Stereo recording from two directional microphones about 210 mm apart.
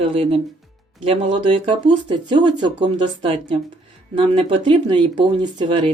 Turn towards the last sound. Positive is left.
turn(degrees=-20)  # may be behind; listen again after turning